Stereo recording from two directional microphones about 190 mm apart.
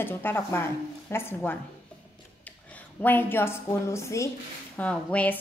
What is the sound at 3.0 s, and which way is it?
A woman's voice, 10° left (ahead or behind).